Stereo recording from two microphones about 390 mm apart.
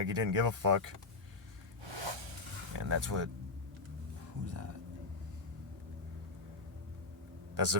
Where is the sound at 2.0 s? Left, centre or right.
Right.